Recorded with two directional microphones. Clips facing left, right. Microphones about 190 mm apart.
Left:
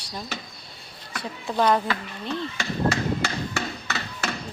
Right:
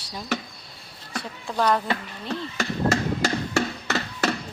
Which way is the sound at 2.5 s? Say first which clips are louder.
Right 3 dB; 45° right (ahead or behind).